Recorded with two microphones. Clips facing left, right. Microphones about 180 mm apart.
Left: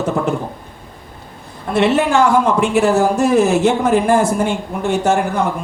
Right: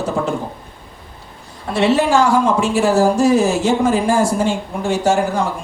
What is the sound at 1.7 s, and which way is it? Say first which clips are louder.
Speech: even; 60° left (ahead or behind).